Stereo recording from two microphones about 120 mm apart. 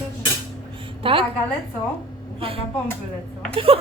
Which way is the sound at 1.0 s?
50° right (ahead or behind).